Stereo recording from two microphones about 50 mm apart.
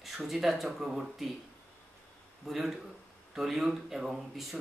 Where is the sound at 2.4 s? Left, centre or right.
Centre.